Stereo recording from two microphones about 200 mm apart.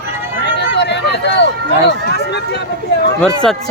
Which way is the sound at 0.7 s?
60° left (ahead or behind).